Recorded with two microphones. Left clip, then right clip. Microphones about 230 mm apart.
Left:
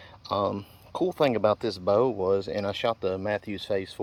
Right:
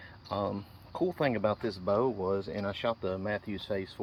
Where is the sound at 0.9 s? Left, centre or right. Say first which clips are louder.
Left 4 dB; left.